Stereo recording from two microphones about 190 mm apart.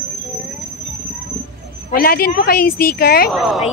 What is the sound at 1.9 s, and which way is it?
A woman's voice, 50° left (ahead or behind).